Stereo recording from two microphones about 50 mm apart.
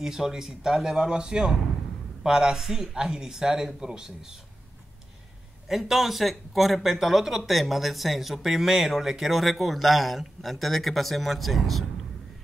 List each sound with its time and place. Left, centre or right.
0.0 s speech: centre
5.7 s speech: centre